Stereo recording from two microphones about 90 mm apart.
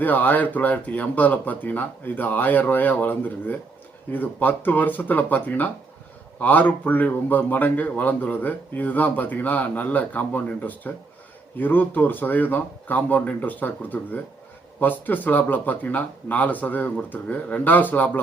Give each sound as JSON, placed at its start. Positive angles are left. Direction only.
{"t": 0.0, "sound": "speech", "side_deg": 20}